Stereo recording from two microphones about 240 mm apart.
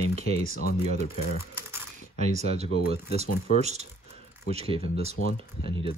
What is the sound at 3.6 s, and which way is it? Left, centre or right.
Speech, right.